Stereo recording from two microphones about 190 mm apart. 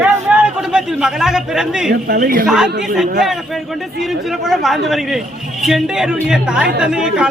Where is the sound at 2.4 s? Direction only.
5° right (ahead or behind).